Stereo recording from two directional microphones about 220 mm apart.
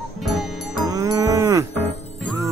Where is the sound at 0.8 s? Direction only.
15° right (ahead or behind).